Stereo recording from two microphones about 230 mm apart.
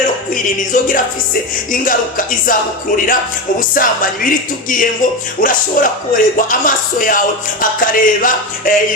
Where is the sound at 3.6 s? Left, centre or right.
Left.